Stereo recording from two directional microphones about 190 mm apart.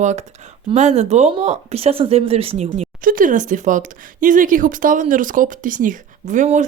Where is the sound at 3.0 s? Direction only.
45° right (ahead or behind).